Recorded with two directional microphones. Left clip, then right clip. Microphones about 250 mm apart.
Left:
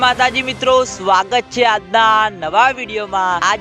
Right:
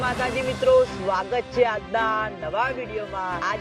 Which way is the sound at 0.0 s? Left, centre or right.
Left.